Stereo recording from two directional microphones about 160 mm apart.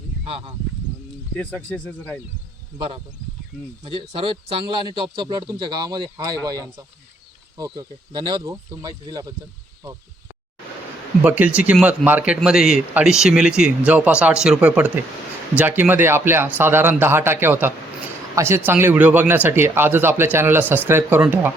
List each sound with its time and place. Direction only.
1.4 s speech: 5° left (ahead or behind)
3.8 s a man's voice: 35° right (ahead or behind)
11.2 s speech: 10° right (ahead or behind)